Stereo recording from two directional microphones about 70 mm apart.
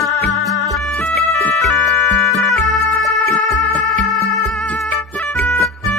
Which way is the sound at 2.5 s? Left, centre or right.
Centre.